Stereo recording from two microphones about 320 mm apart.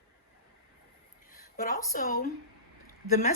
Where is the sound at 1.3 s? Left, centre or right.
Left.